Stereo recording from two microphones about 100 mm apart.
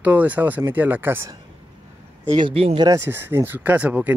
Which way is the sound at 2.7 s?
40° right (ahead or behind).